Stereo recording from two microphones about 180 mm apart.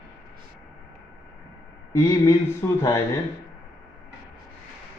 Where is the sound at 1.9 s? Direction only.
15° left (ahead or behind).